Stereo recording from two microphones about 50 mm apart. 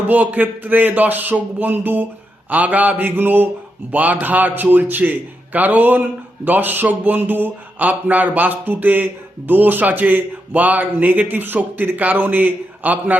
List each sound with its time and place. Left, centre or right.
0.1 s a man's voice: right